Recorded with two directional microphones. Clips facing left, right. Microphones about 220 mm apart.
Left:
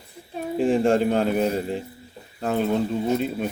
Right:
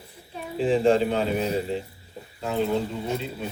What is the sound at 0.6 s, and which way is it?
Speech, 50° left (ahead or behind).